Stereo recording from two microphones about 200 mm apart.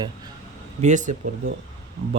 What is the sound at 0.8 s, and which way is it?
Speech, 40° right (ahead or behind).